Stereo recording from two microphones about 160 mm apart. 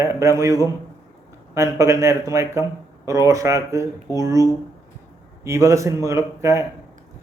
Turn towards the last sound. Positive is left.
turn(degrees=-20)  # may be behind; listen again after turning